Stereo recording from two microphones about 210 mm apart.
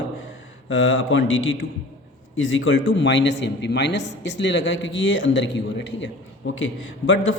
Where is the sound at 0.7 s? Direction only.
65° left (ahead or behind).